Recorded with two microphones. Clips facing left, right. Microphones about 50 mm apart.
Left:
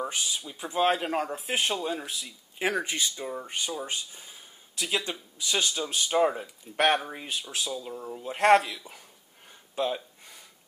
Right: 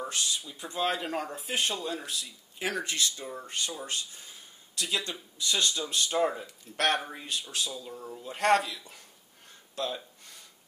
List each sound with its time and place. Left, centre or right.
0.0 s speech: centre
1.2 s speech: centre
7.8 s speech: centre
9.8 s a sound: centre